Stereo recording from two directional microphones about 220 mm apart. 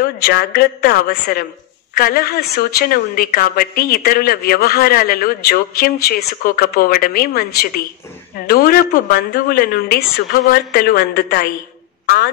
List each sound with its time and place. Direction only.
0.0 s speech: 45° left (ahead or behind)